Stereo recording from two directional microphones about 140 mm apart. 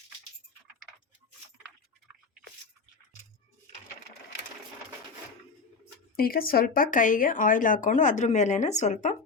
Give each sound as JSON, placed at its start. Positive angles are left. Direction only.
{"t": 6.1, "sound": "speech", "side_deg": 90}